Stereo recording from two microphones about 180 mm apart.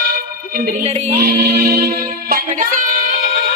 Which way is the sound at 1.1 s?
60° right (ahead or behind).